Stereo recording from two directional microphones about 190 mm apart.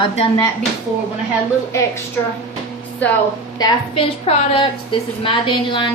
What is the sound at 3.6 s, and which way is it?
A woman's voice, 25° left (ahead or behind).